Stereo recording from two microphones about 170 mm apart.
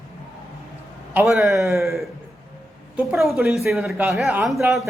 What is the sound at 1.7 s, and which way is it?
Speech, 15° right (ahead or behind).